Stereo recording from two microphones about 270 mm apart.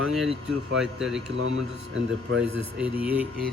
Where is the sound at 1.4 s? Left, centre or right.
Right.